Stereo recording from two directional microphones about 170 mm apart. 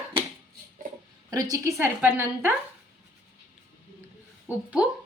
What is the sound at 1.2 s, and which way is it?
A woman's voice, 20° right (ahead or behind).